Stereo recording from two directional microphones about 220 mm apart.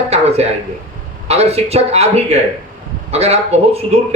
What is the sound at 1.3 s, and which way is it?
A man's voice, 30° right (ahead or behind).